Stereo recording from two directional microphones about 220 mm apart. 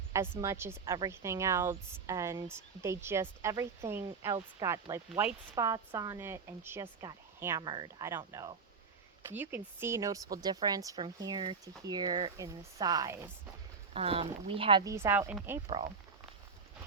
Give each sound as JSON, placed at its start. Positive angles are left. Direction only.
{"t": 0.1, "sound": "speech", "side_deg": -10}
{"t": 13.9, "sound": "speech", "side_deg": -25}
{"t": 15.6, "sound": "speech", "side_deg": -30}